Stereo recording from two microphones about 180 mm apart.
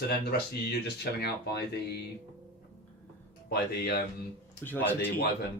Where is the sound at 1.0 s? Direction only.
65° left (ahead or behind).